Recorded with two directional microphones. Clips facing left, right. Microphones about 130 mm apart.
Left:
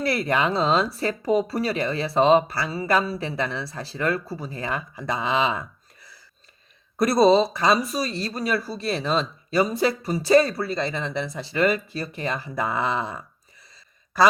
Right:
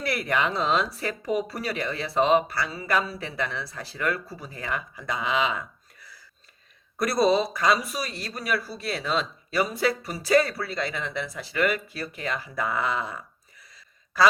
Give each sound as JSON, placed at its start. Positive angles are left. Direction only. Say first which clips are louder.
{"t": 0.0, "sound": "speech", "louder": "left 3 dB", "side_deg": 30}
{"t": 7.0, "sound": "a man's voice", "louder": "left 5 dB", "side_deg": 25}